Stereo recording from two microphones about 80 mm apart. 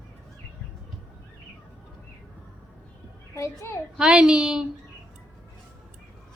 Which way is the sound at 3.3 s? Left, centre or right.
Left.